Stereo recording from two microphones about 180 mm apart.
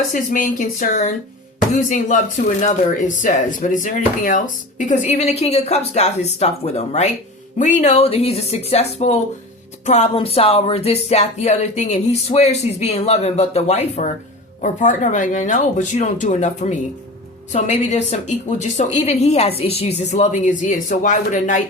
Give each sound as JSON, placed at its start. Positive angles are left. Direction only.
{"t": 0.1, "sound": "speech", "side_deg": 45}